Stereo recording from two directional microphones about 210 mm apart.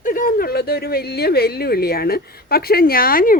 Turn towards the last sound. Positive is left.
turn(degrees=45)  # may be behind; listen again after turning